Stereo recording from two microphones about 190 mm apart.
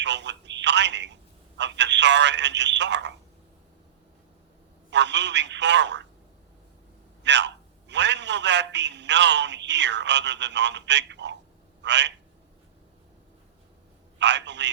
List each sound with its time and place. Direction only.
0.0 s speech: 65° right (ahead or behind)
4.9 s a man's voice: 65° right (ahead or behind)
7.2 s a man's voice: 65° right (ahead or behind)
14.2 s a man's voice: 65° right (ahead or behind)